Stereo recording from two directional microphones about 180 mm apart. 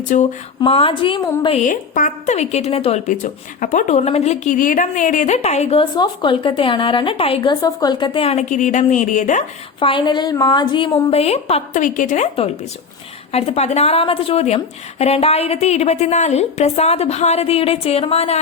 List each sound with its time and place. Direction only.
0.0 s speech: 45° left (ahead or behind)
0.6 s a woman's voice: 30° left (ahead or behind)
1.6 s a woman's voice: 45° left (ahead or behind)
9.8 s a woman's voice: 25° left (ahead or behind)